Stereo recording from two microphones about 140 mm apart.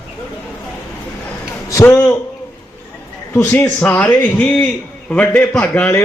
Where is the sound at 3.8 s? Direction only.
10° left (ahead or behind).